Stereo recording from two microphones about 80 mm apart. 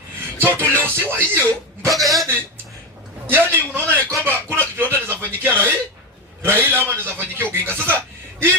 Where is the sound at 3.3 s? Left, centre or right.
Right.